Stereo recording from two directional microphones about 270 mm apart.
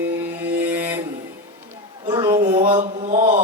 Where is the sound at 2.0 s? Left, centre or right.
Centre.